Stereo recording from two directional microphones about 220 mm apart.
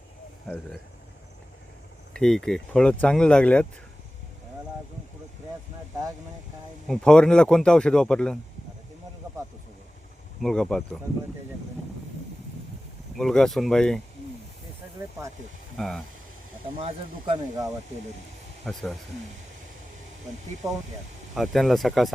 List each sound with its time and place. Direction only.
0.4 s speech: 5° left (ahead or behind)
2.1 s speech: 5° left (ahead or behind)
6.8 s speech: 5° left (ahead or behind)
10.4 s speech: 5° left (ahead or behind)
13.1 s speech: centre (ahead or behind)
15.8 s speech: centre (ahead or behind)
16.8 s speech: 25° right (ahead or behind)
18.6 s speech: centre (ahead or behind)
20.6 s speech: 15° right (ahead or behind)
21.3 s speech: centre (ahead or behind)